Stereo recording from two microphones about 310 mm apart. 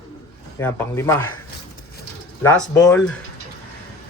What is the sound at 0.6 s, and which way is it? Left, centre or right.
Speech, centre.